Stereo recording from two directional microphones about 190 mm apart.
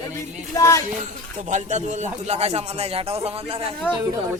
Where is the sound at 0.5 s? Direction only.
15° left (ahead or behind).